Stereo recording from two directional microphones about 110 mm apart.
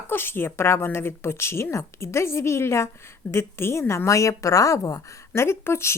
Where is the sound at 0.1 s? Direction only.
20° left (ahead or behind).